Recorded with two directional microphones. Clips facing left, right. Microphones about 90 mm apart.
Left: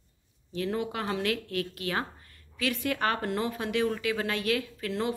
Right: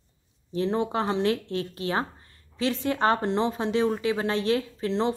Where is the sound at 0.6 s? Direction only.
25° right (ahead or behind).